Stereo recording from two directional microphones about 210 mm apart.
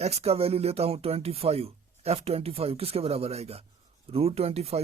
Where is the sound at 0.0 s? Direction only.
30° right (ahead or behind).